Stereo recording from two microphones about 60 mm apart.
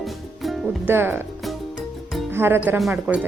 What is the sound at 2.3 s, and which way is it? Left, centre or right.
Speech, right.